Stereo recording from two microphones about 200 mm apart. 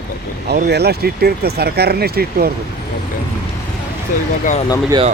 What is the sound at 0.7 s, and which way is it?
Speech, 55° right (ahead or behind).